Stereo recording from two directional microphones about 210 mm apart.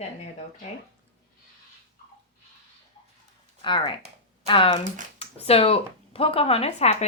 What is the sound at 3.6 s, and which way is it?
Speech, 25° left (ahead or behind).